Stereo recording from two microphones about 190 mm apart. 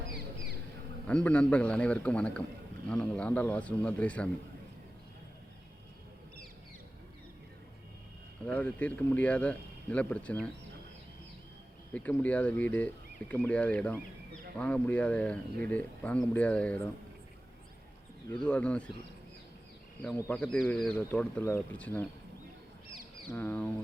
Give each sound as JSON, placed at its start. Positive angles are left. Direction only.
{"t": 1.0, "sound": "speech", "side_deg": 5}
{"t": 8.4, "sound": "speech", "side_deg": 5}
{"t": 11.9, "sound": "speech", "side_deg": 5}
{"t": 18.4, "sound": "speech", "side_deg": 5}
{"t": 20.1, "sound": "speech", "side_deg": 10}
{"t": 23.3, "sound": "speech", "side_deg": 10}